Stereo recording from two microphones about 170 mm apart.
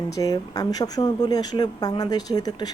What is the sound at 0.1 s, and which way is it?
Speech, 20° left (ahead or behind).